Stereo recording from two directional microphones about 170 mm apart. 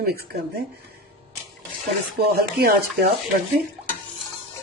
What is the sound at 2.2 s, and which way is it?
Speech, 70° right (ahead or behind).